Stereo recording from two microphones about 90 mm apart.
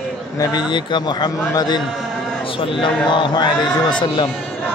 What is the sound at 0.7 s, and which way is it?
Speech, 55° left (ahead or behind).